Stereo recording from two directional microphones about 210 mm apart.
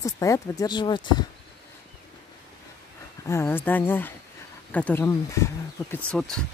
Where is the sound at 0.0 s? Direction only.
15° left (ahead or behind).